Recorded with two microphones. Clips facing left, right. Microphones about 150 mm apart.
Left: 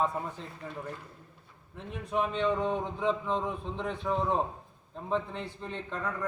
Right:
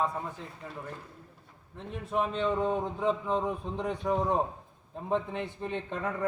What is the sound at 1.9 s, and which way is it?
A man's voice, centre (ahead or behind).